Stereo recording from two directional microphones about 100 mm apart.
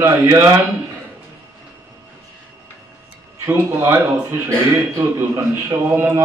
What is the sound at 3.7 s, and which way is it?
A man's voice, 30° right (ahead or behind).